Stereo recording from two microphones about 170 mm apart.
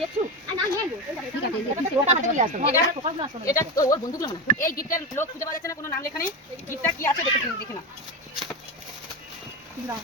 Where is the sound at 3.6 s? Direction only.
20° left (ahead or behind).